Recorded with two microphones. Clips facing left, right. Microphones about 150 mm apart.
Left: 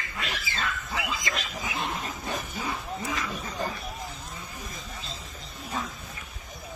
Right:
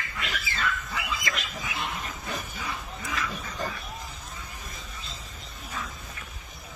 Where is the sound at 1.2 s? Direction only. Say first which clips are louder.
Left 1 dB; 30° left (ahead or behind).